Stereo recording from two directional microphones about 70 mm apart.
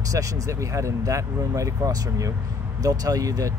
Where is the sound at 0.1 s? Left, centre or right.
Right.